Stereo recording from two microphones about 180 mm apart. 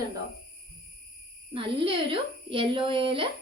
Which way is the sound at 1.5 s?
30° right (ahead or behind).